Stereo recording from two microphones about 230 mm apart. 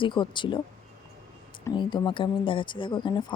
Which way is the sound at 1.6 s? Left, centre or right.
Centre.